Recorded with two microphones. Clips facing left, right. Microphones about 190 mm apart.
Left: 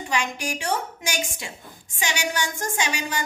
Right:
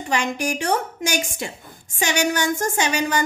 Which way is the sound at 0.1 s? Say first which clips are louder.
Right 5 dB; 50° right (ahead or behind).